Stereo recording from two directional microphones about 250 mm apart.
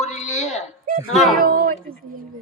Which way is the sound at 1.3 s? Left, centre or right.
Right.